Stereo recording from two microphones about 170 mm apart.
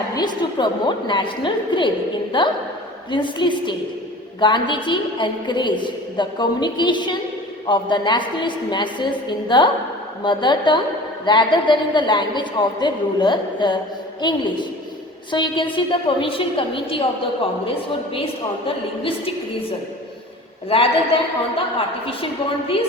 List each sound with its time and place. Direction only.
0.2 s a woman's voice: 25° left (ahead or behind)
20.7 s a woman's voice: 30° left (ahead or behind)